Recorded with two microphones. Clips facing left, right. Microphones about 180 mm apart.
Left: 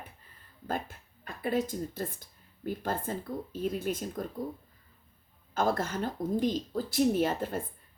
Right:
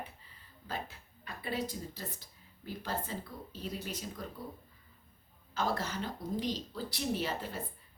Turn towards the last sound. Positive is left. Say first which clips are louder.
# left 7 dB
turn(degrees=50)  # may be behind; listen again after turning